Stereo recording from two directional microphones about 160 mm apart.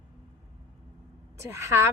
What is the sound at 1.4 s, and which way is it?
Speech, 15° right (ahead or behind).